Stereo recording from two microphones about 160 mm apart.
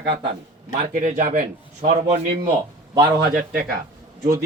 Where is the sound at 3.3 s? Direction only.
60° right (ahead or behind).